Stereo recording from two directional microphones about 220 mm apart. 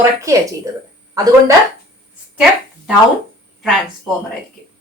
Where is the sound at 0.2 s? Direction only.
15° right (ahead or behind).